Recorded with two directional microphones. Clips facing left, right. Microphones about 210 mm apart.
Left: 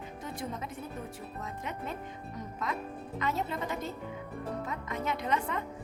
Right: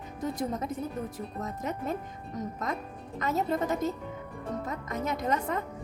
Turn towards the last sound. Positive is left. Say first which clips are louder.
# right 2 dB
turn(degrees=-40)  # may be behind; listen again after turning